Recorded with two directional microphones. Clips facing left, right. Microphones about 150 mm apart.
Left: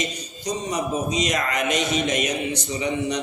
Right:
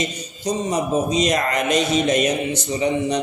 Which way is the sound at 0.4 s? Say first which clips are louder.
Right 4 dB; 30° right (ahead or behind).